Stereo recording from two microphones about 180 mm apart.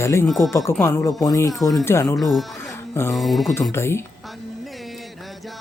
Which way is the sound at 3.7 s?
15° left (ahead or behind).